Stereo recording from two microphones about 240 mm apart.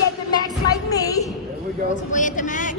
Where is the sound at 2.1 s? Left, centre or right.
Left.